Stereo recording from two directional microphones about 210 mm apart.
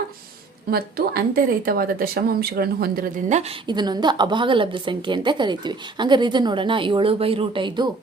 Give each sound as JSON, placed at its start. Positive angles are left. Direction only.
{"t": 0.7, "sound": "speech", "side_deg": -45}